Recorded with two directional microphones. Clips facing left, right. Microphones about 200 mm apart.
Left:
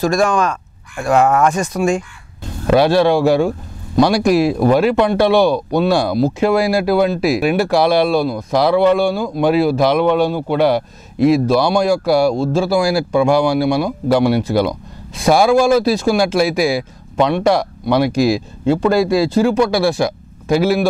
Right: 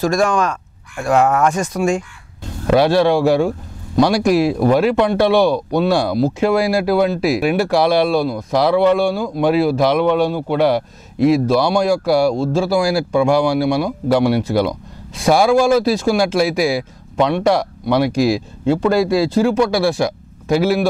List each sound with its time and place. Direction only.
0.0 s speech: 10° left (ahead or behind)